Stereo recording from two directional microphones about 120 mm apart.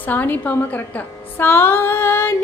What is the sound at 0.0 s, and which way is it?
A woman's voice, 15° left (ahead or behind).